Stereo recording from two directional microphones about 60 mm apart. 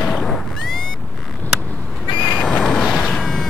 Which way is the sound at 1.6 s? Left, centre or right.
Centre.